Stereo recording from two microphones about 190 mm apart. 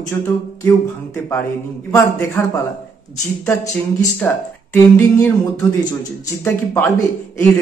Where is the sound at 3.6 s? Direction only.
20° left (ahead or behind).